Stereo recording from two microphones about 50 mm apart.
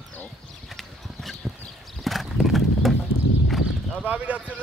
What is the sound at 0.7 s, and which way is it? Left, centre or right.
Clip-clop, centre.